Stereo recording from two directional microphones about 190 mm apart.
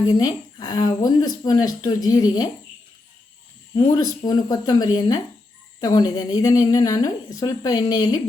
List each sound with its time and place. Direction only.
0.1 s speech: 20° left (ahead or behind)
3.8 s speech: 20° left (ahead or behind)